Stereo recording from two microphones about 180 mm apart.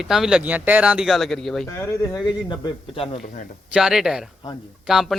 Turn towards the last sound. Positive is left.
turn(degrees=0)  # may be behind; listen again after turning